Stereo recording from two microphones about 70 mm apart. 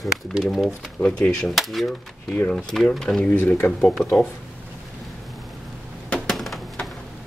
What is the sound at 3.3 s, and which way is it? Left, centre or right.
Speech, left.